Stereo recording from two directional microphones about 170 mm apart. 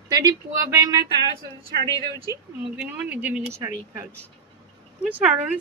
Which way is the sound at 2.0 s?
20° left (ahead or behind).